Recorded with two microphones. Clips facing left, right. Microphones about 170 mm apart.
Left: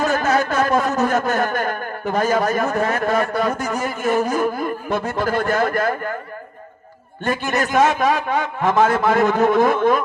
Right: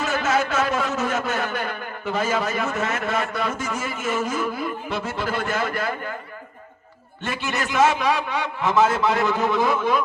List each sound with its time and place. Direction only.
0.0 s a sound: 40° left (ahead or behind)
3.6 s a man's voice: 40° left (ahead or behind)
7.3 s a man's voice: 45° left (ahead or behind)